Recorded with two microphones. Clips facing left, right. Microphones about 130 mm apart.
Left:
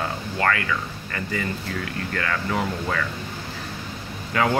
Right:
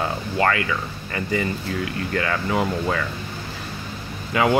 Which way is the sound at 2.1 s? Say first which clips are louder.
Right 3 dB; 20° right (ahead or behind).